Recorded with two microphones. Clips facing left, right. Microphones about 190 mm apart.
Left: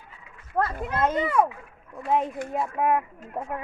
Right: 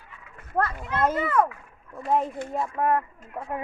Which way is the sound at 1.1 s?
15° left (ahead or behind).